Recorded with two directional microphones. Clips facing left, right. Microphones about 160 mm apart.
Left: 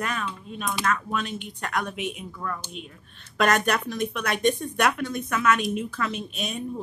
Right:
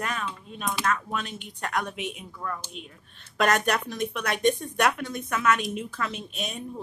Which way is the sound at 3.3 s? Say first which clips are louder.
Left 1 dB; 35° right (ahead or behind).